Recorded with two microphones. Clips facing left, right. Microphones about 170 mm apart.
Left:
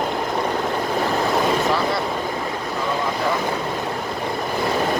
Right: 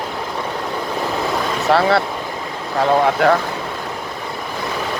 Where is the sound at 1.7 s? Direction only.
65° right (ahead or behind).